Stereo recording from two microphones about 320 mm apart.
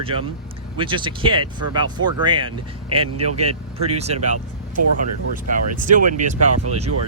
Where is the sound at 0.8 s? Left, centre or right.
Centre.